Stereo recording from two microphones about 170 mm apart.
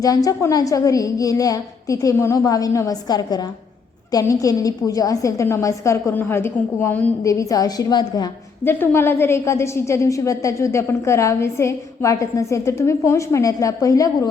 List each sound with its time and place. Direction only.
0.0 s a woman's voice: 20° left (ahead or behind)
8.6 s a woman's voice: 15° left (ahead or behind)